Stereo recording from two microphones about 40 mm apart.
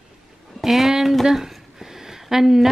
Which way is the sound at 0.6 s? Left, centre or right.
Centre.